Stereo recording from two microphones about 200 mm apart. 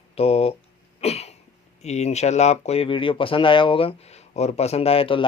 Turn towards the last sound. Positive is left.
turn(degrees=25)  # may be behind; listen again after turning